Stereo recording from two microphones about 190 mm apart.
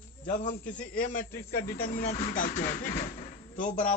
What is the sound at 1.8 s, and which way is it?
Speech, 50° left (ahead or behind).